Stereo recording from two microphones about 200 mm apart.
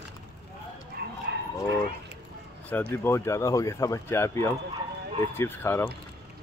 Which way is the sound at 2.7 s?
10° left (ahead or behind).